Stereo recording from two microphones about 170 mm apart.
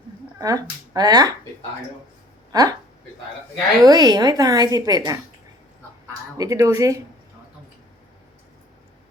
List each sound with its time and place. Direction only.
0.3 s a woman's voice: 20° right (ahead or behind)
2.5 s speech: 20° right (ahead or behind)
3.8 s a woman's voice: 25° right (ahead or behind)
6.3 s a woman's voice: 20° right (ahead or behind)